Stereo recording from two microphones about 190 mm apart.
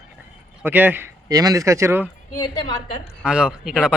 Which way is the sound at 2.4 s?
25° left (ahead or behind).